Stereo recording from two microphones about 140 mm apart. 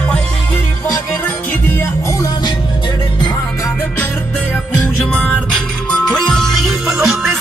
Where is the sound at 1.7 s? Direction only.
20° left (ahead or behind).